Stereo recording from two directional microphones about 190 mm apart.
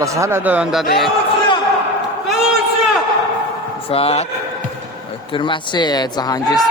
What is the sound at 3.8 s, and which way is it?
Speech, 30° left (ahead or behind).